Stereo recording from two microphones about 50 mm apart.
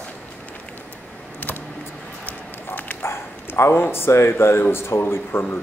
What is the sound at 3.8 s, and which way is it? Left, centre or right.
Speech, left.